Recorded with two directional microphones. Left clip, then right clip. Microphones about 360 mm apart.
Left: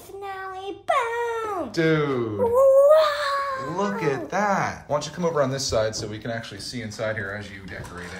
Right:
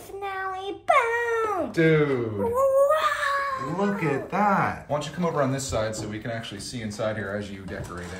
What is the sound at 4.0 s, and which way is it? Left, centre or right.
Speech, centre.